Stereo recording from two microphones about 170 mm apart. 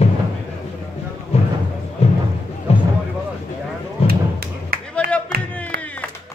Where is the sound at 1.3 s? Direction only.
35° left (ahead or behind).